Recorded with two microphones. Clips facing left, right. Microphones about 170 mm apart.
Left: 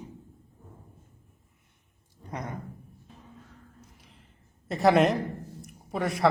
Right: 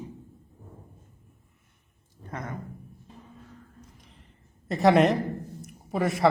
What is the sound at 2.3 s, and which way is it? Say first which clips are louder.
Speech: even; 20° left (ahead or behind).